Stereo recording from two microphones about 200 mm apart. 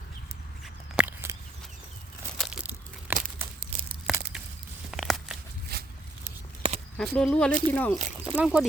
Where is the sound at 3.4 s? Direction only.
10° right (ahead or behind).